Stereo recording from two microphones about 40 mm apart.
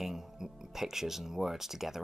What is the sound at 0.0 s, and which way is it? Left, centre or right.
Speech, centre.